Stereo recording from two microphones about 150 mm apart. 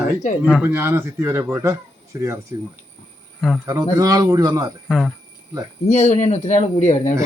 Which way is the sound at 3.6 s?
20° right (ahead or behind).